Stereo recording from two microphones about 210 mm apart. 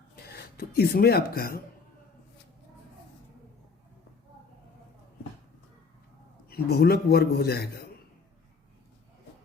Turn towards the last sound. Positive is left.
turn(degrees=50)  # may be behind; listen again after turning